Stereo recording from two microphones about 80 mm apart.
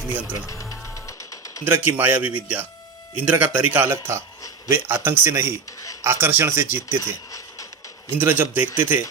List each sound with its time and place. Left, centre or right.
0.1 s speech: right
0.3 s music: left
1.6 s speech: right
8.1 s speech: right